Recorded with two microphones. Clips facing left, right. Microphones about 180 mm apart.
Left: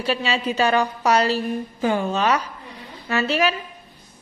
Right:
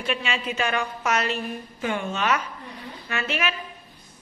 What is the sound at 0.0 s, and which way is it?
A woman's voice, 35° left (ahead or behind).